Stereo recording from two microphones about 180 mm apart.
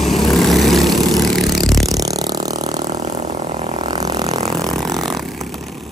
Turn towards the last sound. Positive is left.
turn(degrees=-20)  # may be behind; listen again after turning